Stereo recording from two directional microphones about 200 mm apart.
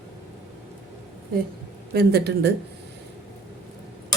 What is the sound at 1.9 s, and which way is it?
Speech, 55° right (ahead or behind).